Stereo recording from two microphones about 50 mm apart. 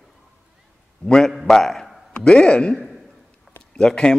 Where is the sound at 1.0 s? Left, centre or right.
Centre.